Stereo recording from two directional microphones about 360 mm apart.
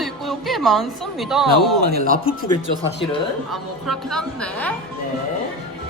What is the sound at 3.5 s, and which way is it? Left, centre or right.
Speech, centre.